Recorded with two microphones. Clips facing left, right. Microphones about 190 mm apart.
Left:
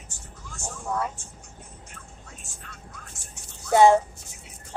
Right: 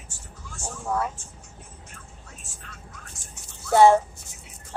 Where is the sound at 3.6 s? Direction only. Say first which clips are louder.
Right 1 dB; 15° left (ahead or behind).